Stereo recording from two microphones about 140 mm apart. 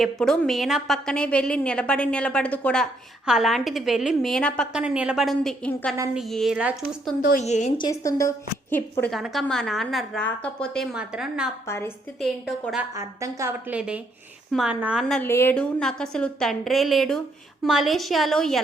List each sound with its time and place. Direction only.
0.0 s a woman's voice: 5° left (ahead or behind)
4.7 s a woman's voice: 5° right (ahead or behind)
7.2 s a woman's voice: 70° left (ahead or behind)
7.8 s a woman's voice: 25° left (ahead or behind)
9.1 s a woman's voice: centre (ahead or behind)
10.9 s a woman's voice: 5° right (ahead or behind)
11.6 s a woman's voice: 20° left (ahead or behind)
12.2 s a woman's voice: centre (ahead or behind)
12.9 s a woman's voice: 20° right (ahead or behind)
13.7 s a woman's voice: 10° right (ahead or behind)
15.1 s a woman's voice: 15° left (ahead or behind)
15.5 s a woman's voice: 5° left (ahead or behind)